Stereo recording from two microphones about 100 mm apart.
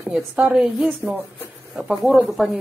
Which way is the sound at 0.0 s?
5° right (ahead or behind).